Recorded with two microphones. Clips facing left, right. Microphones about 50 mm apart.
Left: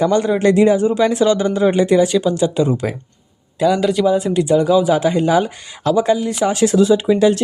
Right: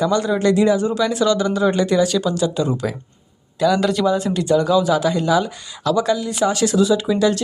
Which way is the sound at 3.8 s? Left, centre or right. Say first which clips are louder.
Left 3 dB; centre.